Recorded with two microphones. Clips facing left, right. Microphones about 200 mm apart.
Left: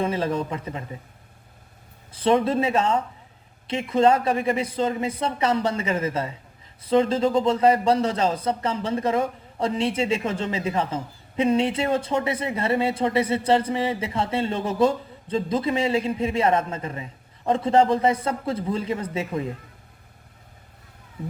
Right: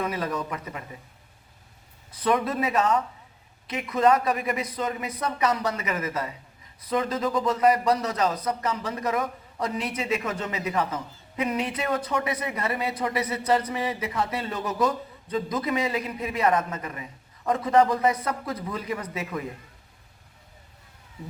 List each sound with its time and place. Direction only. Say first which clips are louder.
0.0 s a man's voice: left 4 dB; 25° left (ahead or behind)
2.1 s a man's voice: left 5 dB; 25° left (ahead or behind)